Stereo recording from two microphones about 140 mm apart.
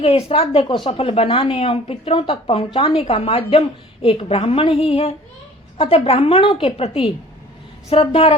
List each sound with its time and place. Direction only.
0.0 s a woman's voice: 45° left (ahead or behind)